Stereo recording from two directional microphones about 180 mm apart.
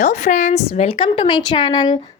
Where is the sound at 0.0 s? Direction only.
45° left (ahead or behind).